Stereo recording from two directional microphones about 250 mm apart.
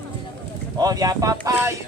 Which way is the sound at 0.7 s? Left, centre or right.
Centre.